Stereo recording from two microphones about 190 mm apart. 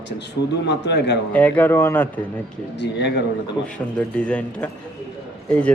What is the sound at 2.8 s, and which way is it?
Speech, 65° left (ahead or behind).